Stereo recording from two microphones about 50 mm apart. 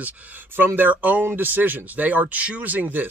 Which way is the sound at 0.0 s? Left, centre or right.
Right.